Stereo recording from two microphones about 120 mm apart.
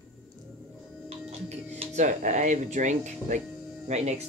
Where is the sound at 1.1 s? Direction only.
60° right (ahead or behind); by 3.4 s 90° right.